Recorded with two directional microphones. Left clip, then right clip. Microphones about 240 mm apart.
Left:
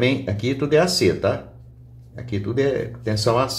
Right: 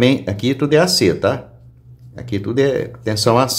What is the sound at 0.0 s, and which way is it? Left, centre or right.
Speech, right.